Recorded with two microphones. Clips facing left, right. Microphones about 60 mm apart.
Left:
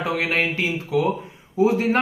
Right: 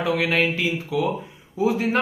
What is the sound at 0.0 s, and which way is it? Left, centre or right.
Speech, left.